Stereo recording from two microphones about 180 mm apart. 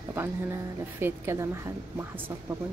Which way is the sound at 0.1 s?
15° right (ahead or behind).